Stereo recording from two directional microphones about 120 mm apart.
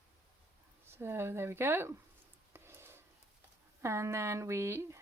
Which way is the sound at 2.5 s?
20° right (ahead or behind).